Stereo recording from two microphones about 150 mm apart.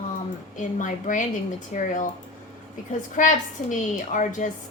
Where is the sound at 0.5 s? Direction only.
55° left (ahead or behind).